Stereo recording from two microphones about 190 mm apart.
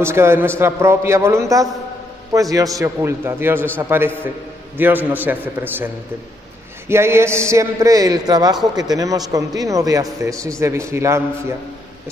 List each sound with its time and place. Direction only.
0.0 s a man's voice: 15° right (ahead or behind)
6.9 s a man's voice: 15° right (ahead or behind)